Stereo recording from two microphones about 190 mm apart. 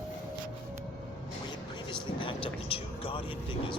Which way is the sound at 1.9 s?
25° left (ahead or behind).